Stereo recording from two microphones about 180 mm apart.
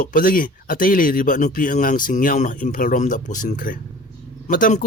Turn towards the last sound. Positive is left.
turn(degrees=45)  # may be behind; listen again after turning